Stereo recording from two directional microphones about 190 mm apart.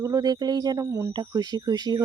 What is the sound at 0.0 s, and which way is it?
Speech, 20° right (ahead or behind).